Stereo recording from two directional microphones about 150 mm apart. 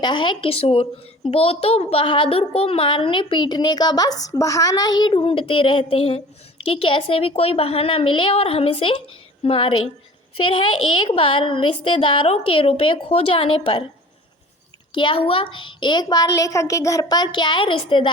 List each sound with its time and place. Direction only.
0.0 s a child's voice: 30° left (ahead or behind)
14.9 s a child's voice: 35° left (ahead or behind)